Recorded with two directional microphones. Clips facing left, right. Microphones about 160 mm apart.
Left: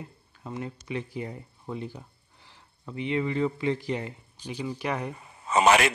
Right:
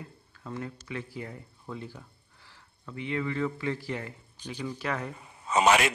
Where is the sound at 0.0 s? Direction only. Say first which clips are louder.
Left 2 dB; 20° left (ahead or behind).